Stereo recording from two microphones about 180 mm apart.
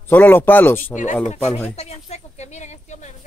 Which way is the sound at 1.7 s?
35° left (ahead or behind).